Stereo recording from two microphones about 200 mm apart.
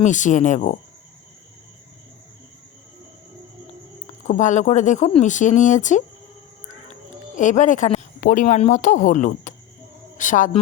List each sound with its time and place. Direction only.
0.0 s speech: 40° left (ahead or behind)
4.0 s speech: 40° left (ahead or behind)
7.3 s speech: 40° left (ahead or behind)